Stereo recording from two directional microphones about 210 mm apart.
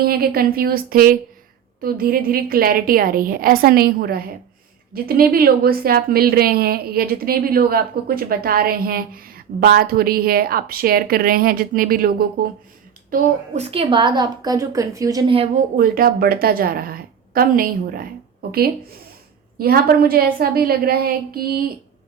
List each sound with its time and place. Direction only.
0.0 s a woman's voice: 45° right (ahead or behind)
13.6 s a woman's voice: 25° right (ahead or behind)
15.8 s a woman's voice: 45° right (ahead or behind)